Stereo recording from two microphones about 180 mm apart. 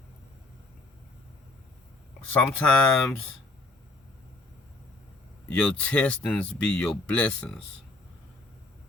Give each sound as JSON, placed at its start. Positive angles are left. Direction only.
{"t": 2.3, "sound": "speech", "side_deg": 5}
{"t": 5.5, "sound": "speech", "side_deg": 5}